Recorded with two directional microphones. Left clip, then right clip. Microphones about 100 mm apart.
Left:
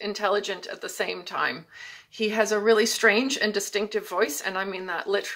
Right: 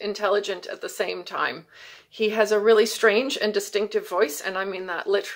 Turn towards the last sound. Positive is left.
turn(degrees=-35)  # may be behind; listen again after turning